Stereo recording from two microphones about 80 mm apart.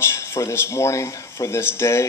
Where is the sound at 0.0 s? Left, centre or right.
Left.